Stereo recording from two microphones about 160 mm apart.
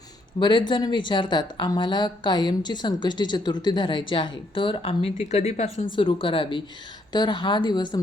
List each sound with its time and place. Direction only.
0.3 s a woman's voice: 30° left (ahead or behind)